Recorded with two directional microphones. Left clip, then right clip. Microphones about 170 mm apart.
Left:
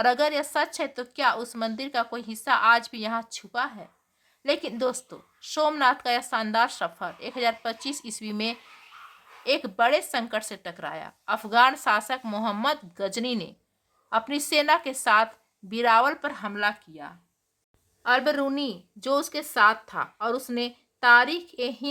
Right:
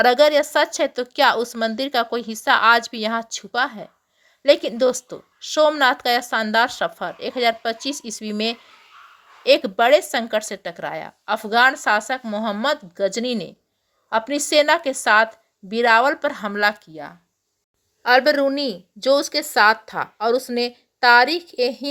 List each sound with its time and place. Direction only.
0.0 s a woman's voice: 30° right (ahead or behind)